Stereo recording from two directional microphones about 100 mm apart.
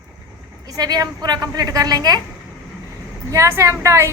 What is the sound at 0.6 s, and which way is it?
A woman's voice, 40° right (ahead or behind).